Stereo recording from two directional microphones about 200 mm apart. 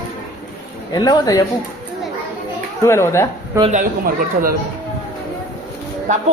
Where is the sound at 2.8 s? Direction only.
15° left (ahead or behind).